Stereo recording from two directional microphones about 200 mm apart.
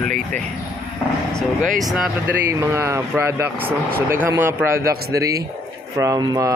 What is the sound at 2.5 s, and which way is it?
Speech, 15° right (ahead or behind).